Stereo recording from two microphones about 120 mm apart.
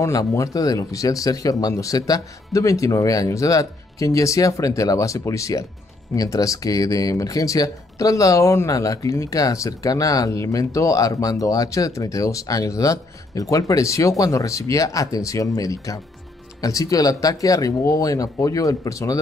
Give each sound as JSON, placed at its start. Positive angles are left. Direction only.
{"t": 0.0, "sound": "speech", "side_deg": 25}